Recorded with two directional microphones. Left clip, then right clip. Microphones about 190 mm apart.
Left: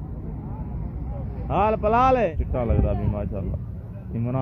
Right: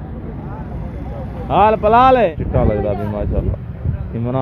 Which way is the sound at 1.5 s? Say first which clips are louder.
Right 9 dB; 5° right (ahead or behind).